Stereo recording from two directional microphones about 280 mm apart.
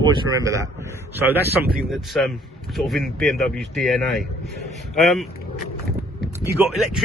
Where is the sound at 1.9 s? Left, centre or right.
Centre.